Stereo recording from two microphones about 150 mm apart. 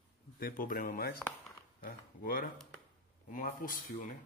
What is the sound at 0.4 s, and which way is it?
Speech, 70° left (ahead or behind).